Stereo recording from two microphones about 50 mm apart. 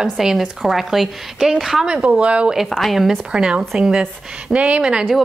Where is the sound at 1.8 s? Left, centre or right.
Centre.